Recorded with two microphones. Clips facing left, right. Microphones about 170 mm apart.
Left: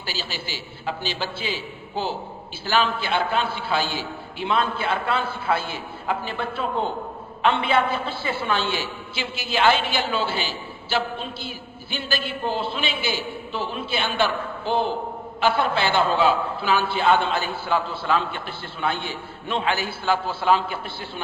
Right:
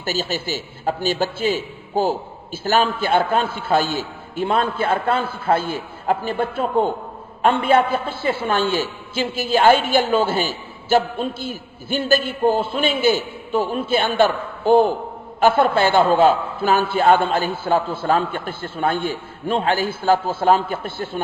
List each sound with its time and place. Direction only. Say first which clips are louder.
0.0 s a woman's voice: right 8 dB; 45° right (ahead or behind)